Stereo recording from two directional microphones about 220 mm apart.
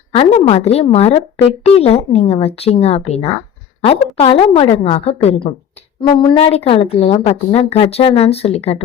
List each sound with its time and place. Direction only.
0.1 s a woman's voice: 30° left (ahead or behind)